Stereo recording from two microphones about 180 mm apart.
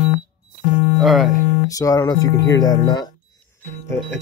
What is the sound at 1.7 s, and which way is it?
Speech, 20° left (ahead or behind).